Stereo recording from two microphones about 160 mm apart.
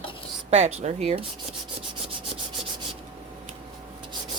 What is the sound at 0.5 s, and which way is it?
Speech, 45° right (ahead or behind).